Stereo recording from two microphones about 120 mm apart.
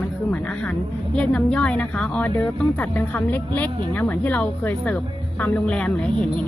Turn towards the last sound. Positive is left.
turn(degrees=10)  # may be behind; listen again after turning